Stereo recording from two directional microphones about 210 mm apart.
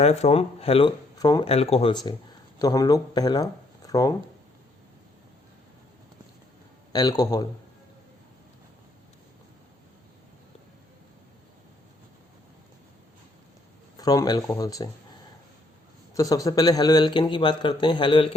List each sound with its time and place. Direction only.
0.0 s a man's voice: 30° left (ahead or behind)
2.6 s speech: 20° left (ahead or behind)
6.9 s speech: 20° left (ahead or behind)
13.9 s speech: 15° left (ahead or behind)
16.1 s a man's voice: 15° left (ahead or behind)